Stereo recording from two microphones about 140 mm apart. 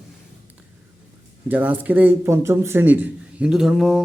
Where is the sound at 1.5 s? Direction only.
10° right (ahead or behind).